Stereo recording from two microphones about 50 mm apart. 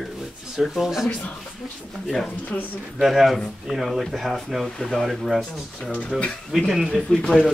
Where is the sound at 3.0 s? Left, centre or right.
Centre.